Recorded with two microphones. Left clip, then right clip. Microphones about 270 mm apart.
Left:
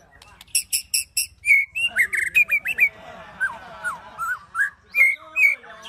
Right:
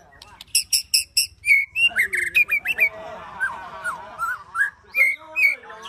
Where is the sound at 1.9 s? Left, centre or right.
Centre.